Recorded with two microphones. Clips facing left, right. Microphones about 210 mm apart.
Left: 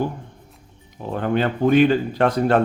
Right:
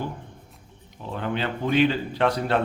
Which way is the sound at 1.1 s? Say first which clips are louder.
Left 7 dB; 50° left (ahead or behind).